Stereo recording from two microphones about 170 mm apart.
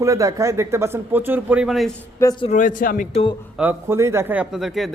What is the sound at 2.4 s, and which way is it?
Speech, 45° left (ahead or behind).